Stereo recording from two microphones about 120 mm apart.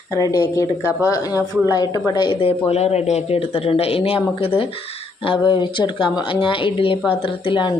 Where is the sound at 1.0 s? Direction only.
30° left (ahead or behind).